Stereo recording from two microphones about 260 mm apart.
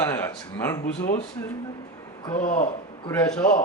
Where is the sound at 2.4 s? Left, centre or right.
Left.